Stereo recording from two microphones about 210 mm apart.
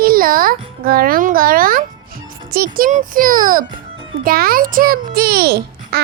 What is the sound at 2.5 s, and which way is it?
A child's voice, 45° right (ahead or behind).